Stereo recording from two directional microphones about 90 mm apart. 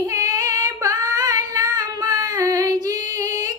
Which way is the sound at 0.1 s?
40° right (ahead or behind).